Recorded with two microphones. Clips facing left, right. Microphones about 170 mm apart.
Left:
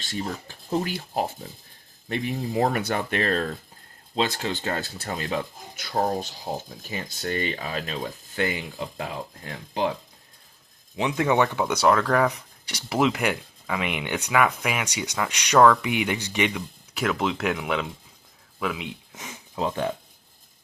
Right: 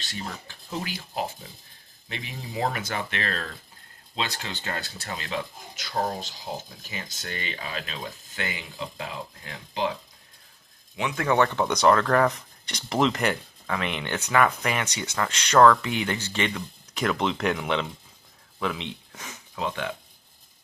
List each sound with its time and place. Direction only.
0.1 s speech: 50° left (ahead or behind)
2.0 s speech: 50° left (ahead or behind)
11.2 s speech: 15° left (ahead or behind)
19.1 s a sound: 20° left (ahead or behind)
19.6 s speech: 35° left (ahead or behind)